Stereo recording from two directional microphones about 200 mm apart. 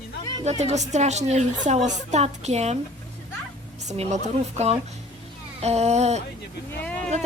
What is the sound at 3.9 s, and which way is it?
Speech, 35° right (ahead or behind).